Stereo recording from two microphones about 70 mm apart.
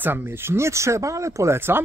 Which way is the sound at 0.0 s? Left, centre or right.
Right.